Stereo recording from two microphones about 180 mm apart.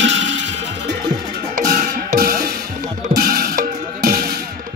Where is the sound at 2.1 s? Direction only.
55° right (ahead or behind).